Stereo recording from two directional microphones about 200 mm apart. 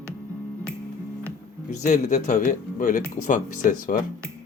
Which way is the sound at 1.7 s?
35° left (ahead or behind).